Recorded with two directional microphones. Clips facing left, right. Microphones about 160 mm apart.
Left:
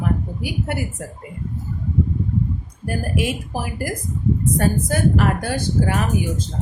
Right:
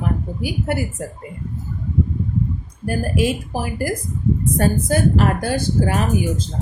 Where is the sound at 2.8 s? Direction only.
30° right (ahead or behind).